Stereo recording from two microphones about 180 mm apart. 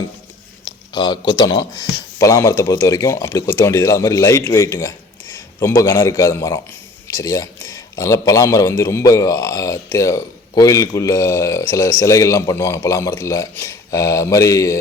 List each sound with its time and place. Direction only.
0.6 s a man's voice: 25° left (ahead or behind)